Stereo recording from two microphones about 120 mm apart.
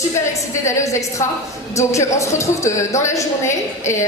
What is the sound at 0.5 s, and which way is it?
A woman's voice, 25° left (ahead or behind).